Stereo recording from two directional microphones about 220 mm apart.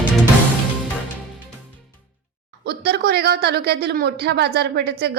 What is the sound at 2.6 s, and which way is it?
Speech, 45° right (ahead or behind).